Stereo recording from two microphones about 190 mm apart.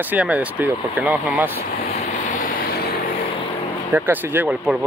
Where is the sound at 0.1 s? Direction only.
5° right (ahead or behind).